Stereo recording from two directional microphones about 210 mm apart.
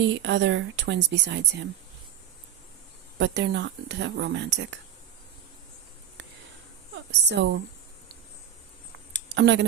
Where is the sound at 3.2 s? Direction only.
55° right (ahead or behind).